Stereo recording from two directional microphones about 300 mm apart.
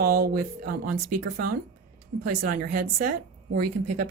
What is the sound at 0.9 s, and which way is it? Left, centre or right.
Speech, right.